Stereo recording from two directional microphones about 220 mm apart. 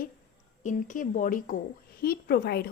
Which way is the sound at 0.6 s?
35° left (ahead or behind).